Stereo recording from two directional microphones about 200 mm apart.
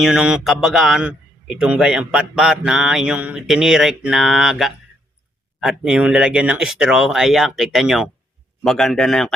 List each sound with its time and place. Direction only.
0.0 s a man's voice: 5° right (ahead or behind)